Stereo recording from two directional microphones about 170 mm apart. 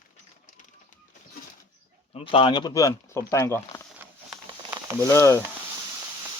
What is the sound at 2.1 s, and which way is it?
Speech, 30° left (ahead or behind).